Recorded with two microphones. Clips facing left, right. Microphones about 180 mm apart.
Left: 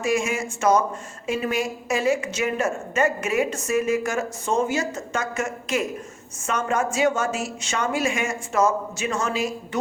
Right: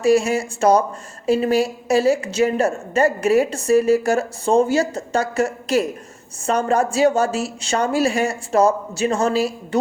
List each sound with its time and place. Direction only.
0.0 s a woman's voice: 35° right (ahead or behind)